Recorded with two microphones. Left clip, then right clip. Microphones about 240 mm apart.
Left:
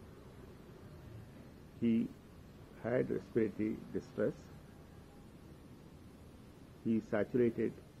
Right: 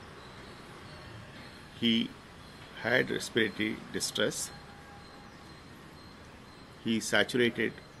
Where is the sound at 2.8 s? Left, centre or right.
Centre.